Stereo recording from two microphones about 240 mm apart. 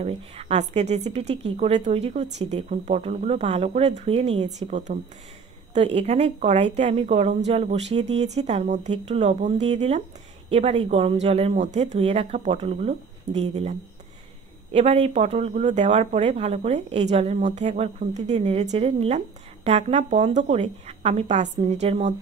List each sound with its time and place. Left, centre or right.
0.0 s speech: right